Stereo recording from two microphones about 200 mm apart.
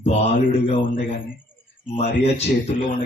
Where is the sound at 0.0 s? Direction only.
30° left (ahead or behind).